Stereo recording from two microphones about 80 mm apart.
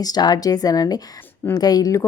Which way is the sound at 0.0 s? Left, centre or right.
Left.